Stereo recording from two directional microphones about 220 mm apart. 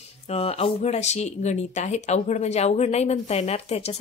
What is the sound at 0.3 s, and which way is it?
Speech, 25° left (ahead or behind).